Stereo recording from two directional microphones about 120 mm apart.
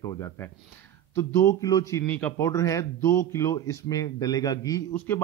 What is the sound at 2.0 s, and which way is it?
Speech, 10° left (ahead or behind).